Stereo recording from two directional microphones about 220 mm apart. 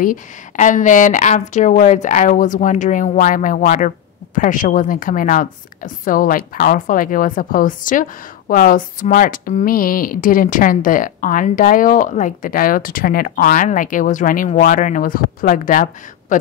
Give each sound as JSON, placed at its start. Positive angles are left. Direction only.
{"t": 0.0, "sound": "a woman's voice", "side_deg": 35}